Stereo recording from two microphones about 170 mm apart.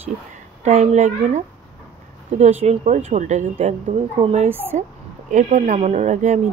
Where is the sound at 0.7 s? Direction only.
40° right (ahead or behind).